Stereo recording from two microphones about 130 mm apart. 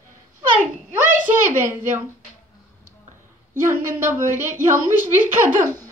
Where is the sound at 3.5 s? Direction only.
20° right (ahead or behind).